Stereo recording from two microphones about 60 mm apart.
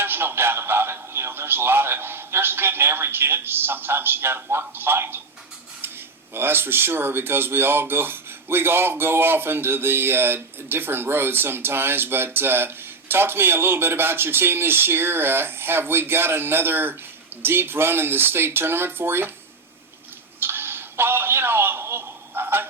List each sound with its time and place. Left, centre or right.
0.0 s speech: right
6.3 s speech: right
20.4 s a sound: right